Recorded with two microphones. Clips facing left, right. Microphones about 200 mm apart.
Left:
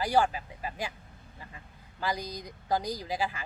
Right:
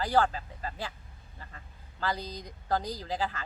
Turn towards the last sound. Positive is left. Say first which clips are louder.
# left 1 dB
turn(degrees=10)  # may be behind; listen again after turning